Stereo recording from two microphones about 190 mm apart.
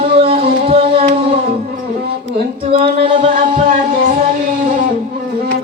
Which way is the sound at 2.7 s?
30° right (ahead or behind).